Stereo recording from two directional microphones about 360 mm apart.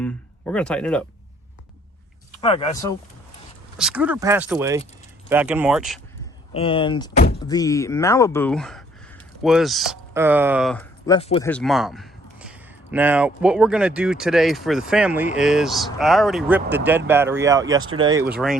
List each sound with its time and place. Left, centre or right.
0.0 s speech: centre
2.4 s speech: centre
3.8 s speech: centre
6.5 s speech: centre
11.4 s speech: centre